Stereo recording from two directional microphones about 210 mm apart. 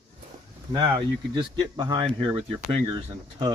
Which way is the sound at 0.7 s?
20° right (ahead or behind).